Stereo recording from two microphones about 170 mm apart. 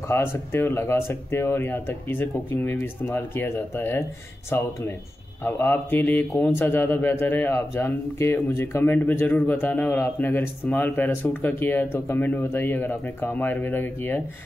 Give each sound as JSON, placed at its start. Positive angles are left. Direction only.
{"t": 0.1, "sound": "speech", "side_deg": 15}